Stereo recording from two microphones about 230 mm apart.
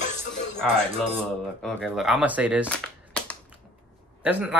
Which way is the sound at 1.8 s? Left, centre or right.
Centre.